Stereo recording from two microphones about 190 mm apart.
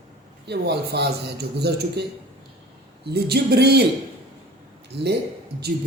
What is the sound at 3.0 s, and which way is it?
Speech, 60° right (ahead or behind).